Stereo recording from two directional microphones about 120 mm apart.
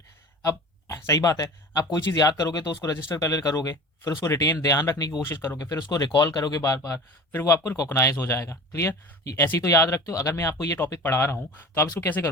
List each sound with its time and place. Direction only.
0.4 s speech: 25° left (ahead or behind)